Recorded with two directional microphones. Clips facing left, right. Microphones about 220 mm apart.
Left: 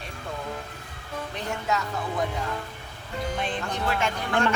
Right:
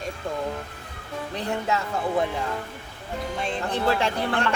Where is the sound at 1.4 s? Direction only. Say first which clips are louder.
Right 3 dB; 35° right (ahead or behind).